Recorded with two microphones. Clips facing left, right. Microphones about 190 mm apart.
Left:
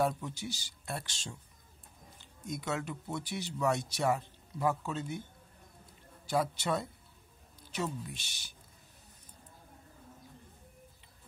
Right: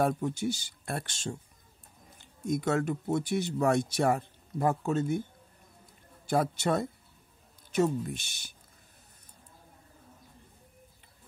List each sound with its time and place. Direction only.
0.0 s speech: 50° right (ahead or behind)
6.2 s speech: 50° right (ahead or behind)